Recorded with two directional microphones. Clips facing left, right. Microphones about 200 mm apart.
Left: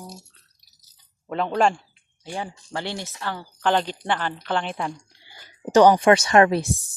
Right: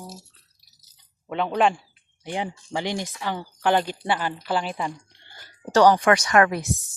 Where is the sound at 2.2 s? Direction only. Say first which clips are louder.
Right 3 dB; 15° right (ahead or behind); by 5.3 s centre (ahead or behind).